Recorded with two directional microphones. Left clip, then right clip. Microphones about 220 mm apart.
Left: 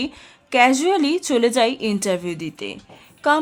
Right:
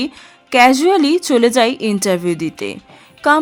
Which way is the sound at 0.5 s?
15° right (ahead or behind).